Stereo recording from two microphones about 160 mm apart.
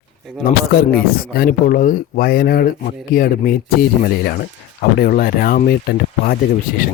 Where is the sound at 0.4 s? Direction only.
70° left (ahead or behind).